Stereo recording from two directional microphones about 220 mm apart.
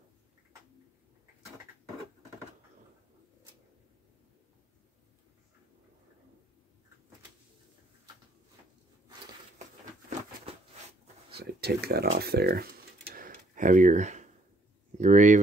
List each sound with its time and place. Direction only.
11.3 s speech: 45° right (ahead or behind)
13.1 s tick-tock: 40° right (ahead or behind)
15.0 s speech: 35° right (ahead or behind)